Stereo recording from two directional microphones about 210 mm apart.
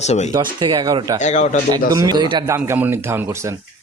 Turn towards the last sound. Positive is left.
turn(degrees=-15)  # may be behind; listen again after turning